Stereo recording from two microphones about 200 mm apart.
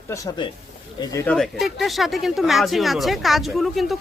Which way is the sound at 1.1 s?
5° left (ahead or behind).